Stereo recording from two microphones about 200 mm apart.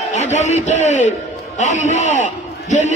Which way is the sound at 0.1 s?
35° left (ahead or behind).